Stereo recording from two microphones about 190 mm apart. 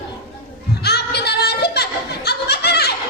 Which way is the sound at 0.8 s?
60° left (ahead or behind).